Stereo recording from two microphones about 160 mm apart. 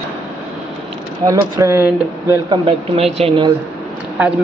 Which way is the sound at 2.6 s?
40° right (ahead or behind).